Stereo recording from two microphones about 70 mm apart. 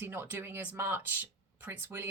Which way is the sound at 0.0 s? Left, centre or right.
Right.